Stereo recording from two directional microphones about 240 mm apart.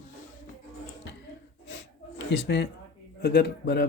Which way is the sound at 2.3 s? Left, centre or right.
Left.